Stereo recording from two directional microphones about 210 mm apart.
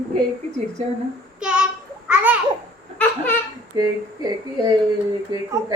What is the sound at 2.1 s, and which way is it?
Babbling, 5° right (ahead or behind).